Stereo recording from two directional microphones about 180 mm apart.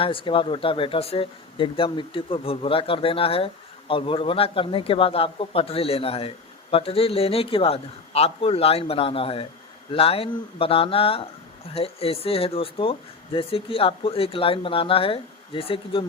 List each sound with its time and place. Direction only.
0.0 s speech: 30° left (ahead or behind)